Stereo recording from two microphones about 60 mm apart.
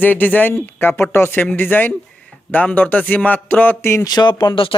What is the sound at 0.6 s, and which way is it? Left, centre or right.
A man's voice, left.